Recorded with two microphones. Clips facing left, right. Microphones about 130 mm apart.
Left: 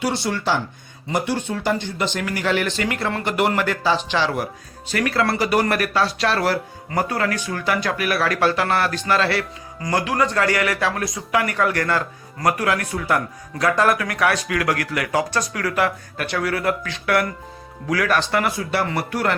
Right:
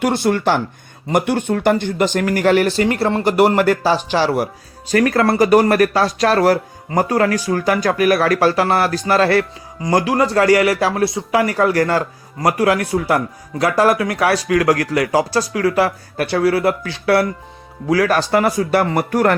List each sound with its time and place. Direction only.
0.0 s a man's voice: 50° right (ahead or behind)